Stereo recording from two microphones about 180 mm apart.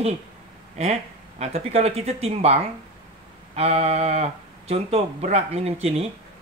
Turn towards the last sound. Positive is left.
turn(degrees=-35)  # may be behind; listen again after turning